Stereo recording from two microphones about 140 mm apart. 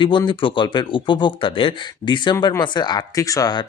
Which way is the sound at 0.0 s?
35° left (ahead or behind).